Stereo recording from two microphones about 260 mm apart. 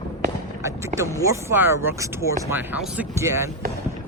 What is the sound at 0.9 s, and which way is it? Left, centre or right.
Speech, right.